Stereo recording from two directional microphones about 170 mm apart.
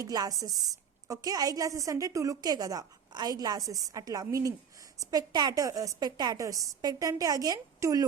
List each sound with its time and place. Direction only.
0.0 s a woman's voice: 20° right (ahead or behind)